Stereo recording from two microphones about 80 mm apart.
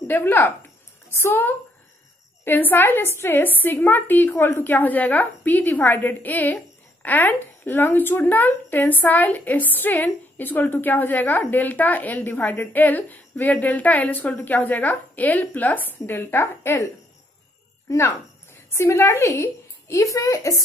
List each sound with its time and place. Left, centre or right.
0.0 s a woman's voice: left